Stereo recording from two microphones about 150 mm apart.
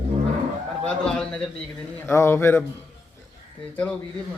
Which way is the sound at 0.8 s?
5° left (ahead or behind).